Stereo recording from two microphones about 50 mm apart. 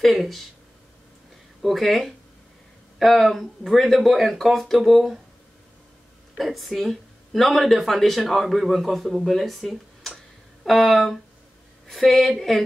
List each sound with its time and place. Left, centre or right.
0.0 s speech: centre
1.6 s speech: centre
6.3 s speech: centre